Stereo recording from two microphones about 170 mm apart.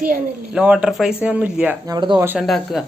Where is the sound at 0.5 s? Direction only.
5° right (ahead or behind).